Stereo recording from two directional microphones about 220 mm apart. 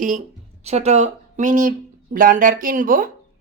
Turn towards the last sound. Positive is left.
turn(degrees=-40)  # may be behind; listen again after turning